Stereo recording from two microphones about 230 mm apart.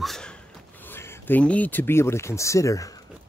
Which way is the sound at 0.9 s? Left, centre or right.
Centre.